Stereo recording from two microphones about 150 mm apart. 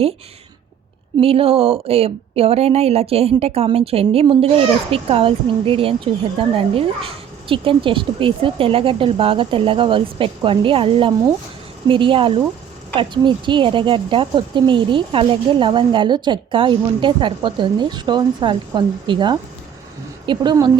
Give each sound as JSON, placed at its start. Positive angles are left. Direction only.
{"t": 1.2, "sound": "speech", "side_deg": -40}